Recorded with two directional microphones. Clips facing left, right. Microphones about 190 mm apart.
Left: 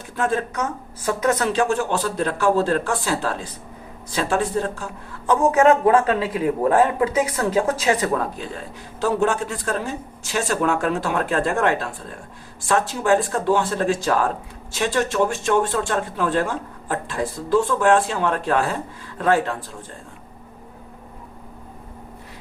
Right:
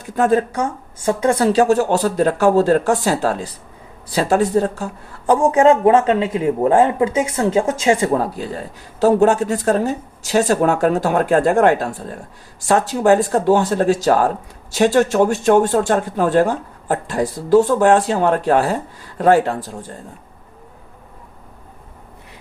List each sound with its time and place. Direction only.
0.2 s speech: 40° right (ahead or behind)